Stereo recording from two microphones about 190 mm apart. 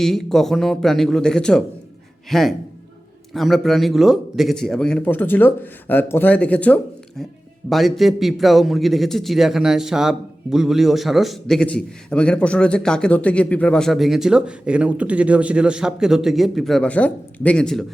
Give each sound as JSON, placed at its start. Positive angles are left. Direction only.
{"t": 0.0, "sound": "a man's voice", "side_deg": 0}